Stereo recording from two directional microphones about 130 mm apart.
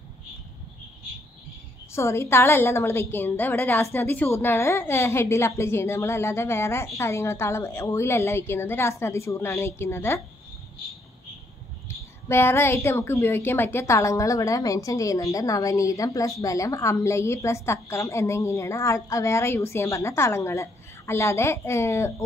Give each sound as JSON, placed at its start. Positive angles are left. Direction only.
{"t": 1.9, "sound": "a woman's voice", "side_deg": 20}
{"t": 12.3, "sound": "a woman's voice", "side_deg": 20}